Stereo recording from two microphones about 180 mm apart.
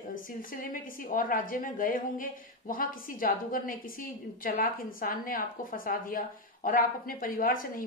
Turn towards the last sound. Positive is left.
turn(degrees=50)  # may be behind; listen again after turning